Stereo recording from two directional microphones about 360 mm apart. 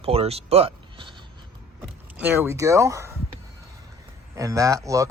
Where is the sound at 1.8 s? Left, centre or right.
Centre.